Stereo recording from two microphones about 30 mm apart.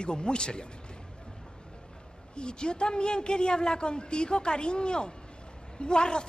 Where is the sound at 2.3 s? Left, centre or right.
Left.